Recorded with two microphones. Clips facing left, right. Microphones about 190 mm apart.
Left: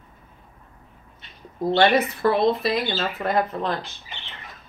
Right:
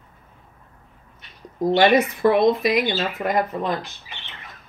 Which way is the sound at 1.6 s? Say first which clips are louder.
Right 2 dB; 15° right (ahead or behind).